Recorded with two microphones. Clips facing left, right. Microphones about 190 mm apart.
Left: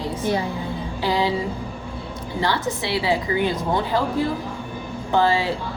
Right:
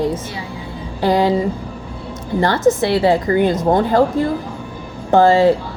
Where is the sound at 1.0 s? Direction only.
45° right (ahead or behind).